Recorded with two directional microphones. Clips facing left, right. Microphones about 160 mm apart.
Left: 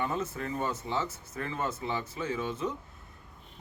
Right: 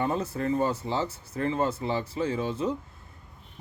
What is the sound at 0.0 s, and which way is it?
Speech, 35° right (ahead or behind).